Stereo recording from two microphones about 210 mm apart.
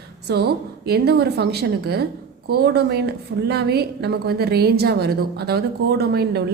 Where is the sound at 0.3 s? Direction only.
50° right (ahead or behind).